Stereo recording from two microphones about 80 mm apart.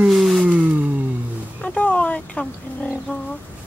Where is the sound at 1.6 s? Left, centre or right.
Centre.